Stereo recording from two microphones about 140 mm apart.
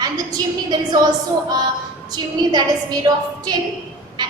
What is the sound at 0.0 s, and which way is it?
A woman's voice, 30° right (ahead or behind).